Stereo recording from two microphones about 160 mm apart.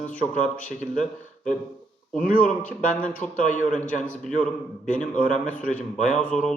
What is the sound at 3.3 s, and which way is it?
Speech, 55° left (ahead or behind).